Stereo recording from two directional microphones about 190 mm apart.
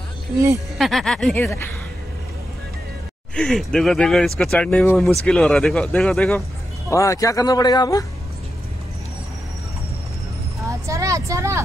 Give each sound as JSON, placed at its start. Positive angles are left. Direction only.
{"t": 0.7, "sound": "speech", "side_deg": 0}
{"t": 3.3, "sound": "speech", "side_deg": 0}
{"t": 6.9, "sound": "speech", "side_deg": 15}
{"t": 10.7, "sound": "speech", "side_deg": -15}